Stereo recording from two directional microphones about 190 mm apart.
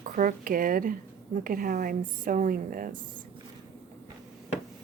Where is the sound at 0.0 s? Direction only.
45° right (ahead or behind).